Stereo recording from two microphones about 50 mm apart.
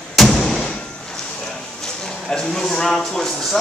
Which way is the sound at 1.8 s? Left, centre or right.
Centre.